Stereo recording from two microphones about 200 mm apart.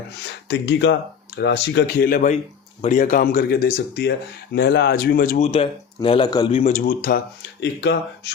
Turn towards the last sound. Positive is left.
turn(degrees=60)  # may be behind; listen again after turning